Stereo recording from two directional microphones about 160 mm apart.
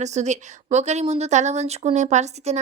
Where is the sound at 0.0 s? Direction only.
45° right (ahead or behind).